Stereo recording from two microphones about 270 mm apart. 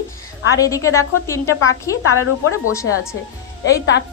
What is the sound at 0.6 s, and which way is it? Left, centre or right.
Speech, centre.